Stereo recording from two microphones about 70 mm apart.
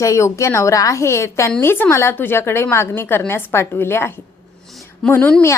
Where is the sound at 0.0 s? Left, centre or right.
Left.